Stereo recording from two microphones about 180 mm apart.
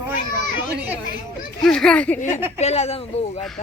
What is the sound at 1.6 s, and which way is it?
Speech, 5° left (ahead or behind).